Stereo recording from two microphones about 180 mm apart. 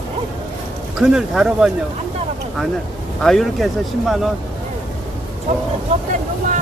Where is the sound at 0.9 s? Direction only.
5° right (ahead or behind).